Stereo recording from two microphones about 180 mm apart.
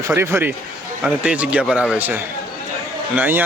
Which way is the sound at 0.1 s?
10° right (ahead or behind).